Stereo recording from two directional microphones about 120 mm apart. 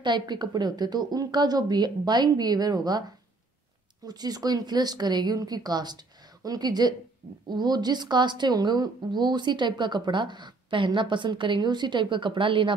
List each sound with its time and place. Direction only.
0.0 s speech: 40° right (ahead or behind)